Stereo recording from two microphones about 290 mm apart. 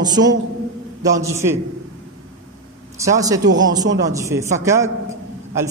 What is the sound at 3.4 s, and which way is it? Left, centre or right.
Speech, right.